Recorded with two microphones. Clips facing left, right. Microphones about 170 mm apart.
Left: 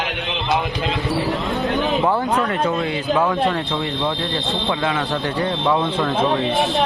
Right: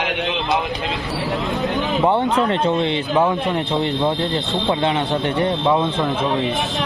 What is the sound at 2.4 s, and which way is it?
Speech, 30° right (ahead or behind).